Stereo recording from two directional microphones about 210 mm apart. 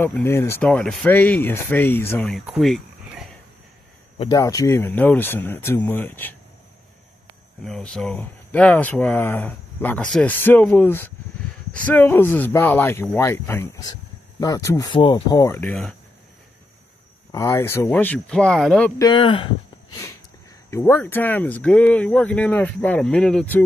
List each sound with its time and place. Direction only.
0.0 s speech: 10° left (ahead or behind)
4.2 s speech: 20° left (ahead or behind)
7.6 s speech: 5° left (ahead or behind)
17.3 s speech: 15° left (ahead or behind)
18.9 s speech: 20° left (ahead or behind)
20.7 s speech: 10° left (ahead or behind)